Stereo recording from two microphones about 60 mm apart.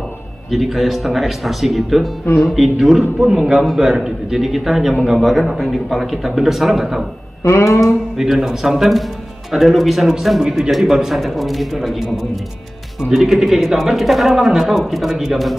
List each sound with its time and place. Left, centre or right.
0.5 s a man's voice: centre
7.4 s a sound: left
8.2 s a man's voice: centre